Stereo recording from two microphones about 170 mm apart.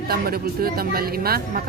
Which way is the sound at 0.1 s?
65° right (ahead or behind).